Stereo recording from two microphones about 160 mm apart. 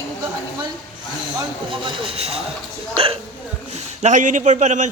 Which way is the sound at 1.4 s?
30° right (ahead or behind).